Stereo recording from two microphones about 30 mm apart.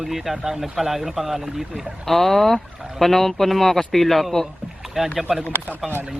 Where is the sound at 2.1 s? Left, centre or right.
Centre.